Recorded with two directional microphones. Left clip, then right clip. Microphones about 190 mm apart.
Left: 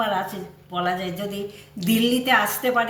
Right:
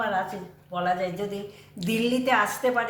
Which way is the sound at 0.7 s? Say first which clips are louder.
Left 1 dB; 10° right (ahead or behind).